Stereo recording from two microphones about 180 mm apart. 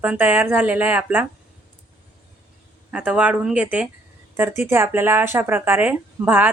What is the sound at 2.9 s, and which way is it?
A woman's voice, 5° right (ahead or behind).